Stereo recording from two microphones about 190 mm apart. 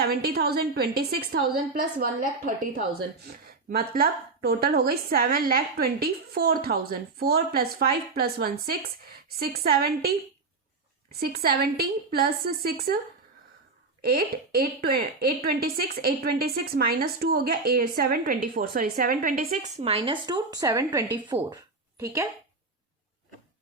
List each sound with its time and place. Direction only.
0.0 s a woman's voice: 55° right (ahead or behind)
3.7 s a woman's voice: 50° right (ahead or behind)
11.2 s a woman's voice: 50° right (ahead or behind)
14.0 s a woman's voice: 50° right (ahead or behind); by 22.3 s 15° right (ahead or behind)